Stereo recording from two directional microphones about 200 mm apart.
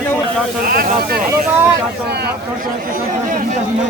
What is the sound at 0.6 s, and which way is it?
Speech, 45° right (ahead or behind).